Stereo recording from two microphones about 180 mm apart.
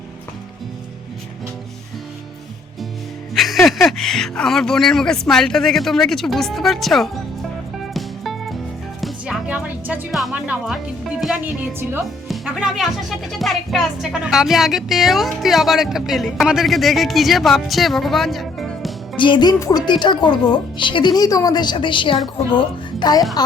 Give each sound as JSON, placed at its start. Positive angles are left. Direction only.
{"t": 3.3, "sound": "speech", "side_deg": 0}
{"t": 7.9, "sound": "music", "side_deg": 0}
{"t": 9.0, "sound": "speech", "side_deg": 0}
{"t": 19.1, "sound": "a child's voice", "side_deg": 25}